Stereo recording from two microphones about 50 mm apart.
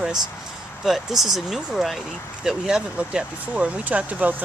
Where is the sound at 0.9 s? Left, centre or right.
Centre.